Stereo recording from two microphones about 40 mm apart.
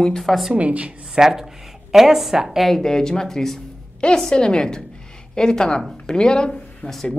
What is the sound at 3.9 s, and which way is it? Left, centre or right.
A woman's voice, left.